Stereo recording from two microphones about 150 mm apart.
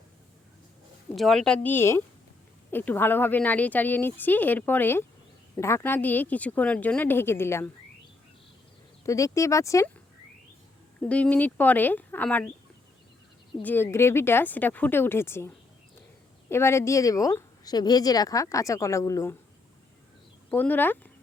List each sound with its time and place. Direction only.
1.1 s speech: centre (ahead or behind)
9.0 s a woman's voice: 20° left (ahead or behind)
11.1 s speech: 10° left (ahead or behind)
13.6 s a woman's voice: 15° left (ahead or behind)
20.5 s speech: 10° left (ahead or behind)